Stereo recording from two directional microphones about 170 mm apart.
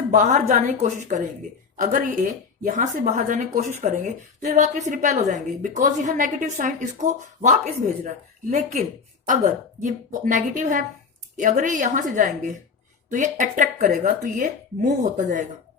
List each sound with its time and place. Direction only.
0.1 s speech: 45° right (ahead or behind)